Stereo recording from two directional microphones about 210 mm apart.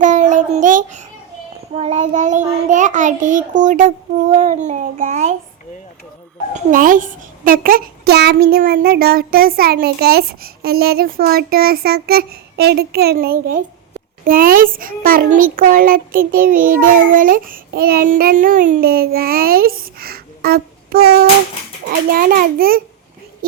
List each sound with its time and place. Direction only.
0.0 s child singing: 35° right (ahead or behind)
1.7 s a child's voice: 30° right (ahead or behind)
6.5 s a child's voice: 40° right (ahead or behind)
23.4 s a sound: 45° right (ahead or behind)